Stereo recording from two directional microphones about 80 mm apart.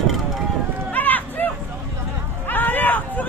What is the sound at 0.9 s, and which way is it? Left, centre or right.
Run, left.